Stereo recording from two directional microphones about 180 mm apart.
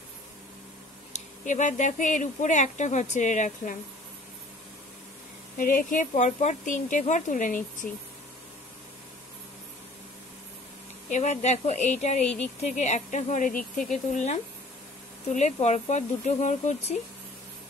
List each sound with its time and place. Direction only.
1.1 s speech: 45° left (ahead or behind)
5.6 s speech: 50° left (ahead or behind)
11.1 s speech: 40° left (ahead or behind)